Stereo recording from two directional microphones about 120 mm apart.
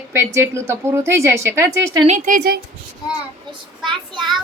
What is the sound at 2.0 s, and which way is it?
Speech, 90° right.